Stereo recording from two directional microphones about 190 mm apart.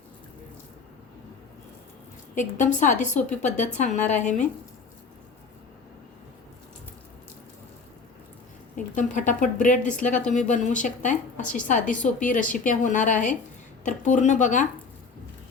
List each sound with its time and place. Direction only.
2.3 s speech: 40° left (ahead or behind)
8.7 s speech: 40° left (ahead or behind)